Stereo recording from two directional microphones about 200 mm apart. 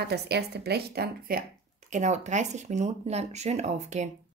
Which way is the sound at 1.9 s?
35° right (ahead or behind).